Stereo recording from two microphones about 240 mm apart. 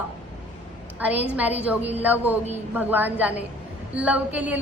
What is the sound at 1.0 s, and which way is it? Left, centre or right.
A woman's voice, centre.